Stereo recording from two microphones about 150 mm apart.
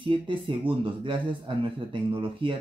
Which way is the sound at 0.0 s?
35° right (ahead or behind).